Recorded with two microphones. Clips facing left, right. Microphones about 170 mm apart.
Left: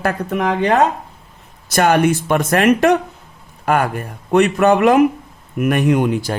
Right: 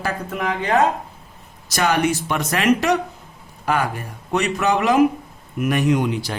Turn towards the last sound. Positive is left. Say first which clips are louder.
# left 4 dB
turn(degrees=50)  # may be behind; listen again after turning